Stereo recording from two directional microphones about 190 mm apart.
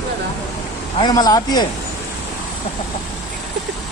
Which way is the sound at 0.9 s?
20° left (ahead or behind).